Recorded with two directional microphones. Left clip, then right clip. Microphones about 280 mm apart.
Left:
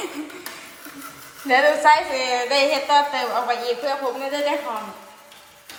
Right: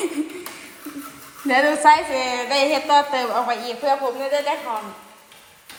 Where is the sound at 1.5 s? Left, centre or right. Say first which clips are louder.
Even; centre.